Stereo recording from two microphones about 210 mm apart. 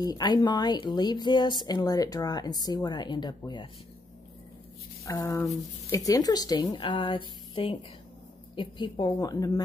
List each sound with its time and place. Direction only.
0.0 s a woman's voice: 20° left (ahead or behind)
5.0 s a woman's voice: 15° left (ahead or behind)